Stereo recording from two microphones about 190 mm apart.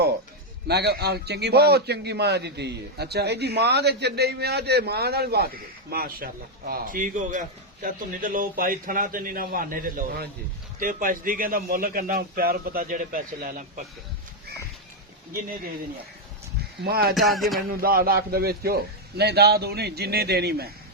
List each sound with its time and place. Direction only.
0.7 s a man's voice: 60° right (ahead or behind)
16.8 s a man's voice: 55° right (ahead or behind)
17.2 s a sound: centre (ahead or behind)
17.7 s a man's voice: 50° right (ahead or behind)